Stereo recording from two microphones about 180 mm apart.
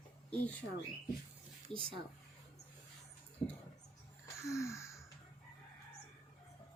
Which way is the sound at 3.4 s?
35° left (ahead or behind).